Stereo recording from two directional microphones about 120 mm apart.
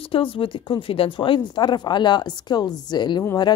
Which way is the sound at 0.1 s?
50° left (ahead or behind).